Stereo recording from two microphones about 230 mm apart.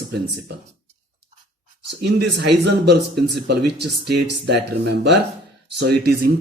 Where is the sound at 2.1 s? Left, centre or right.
Right.